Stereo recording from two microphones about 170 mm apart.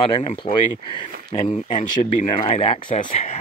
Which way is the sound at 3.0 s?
45° left (ahead or behind).